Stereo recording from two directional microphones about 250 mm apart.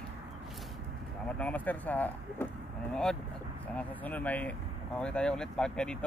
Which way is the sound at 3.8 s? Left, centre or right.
Centre.